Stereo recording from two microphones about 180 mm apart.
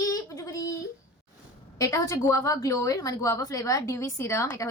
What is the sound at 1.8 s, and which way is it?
A woman's voice, 15° left (ahead or behind).